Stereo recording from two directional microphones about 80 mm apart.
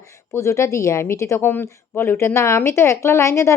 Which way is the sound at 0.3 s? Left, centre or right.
Left.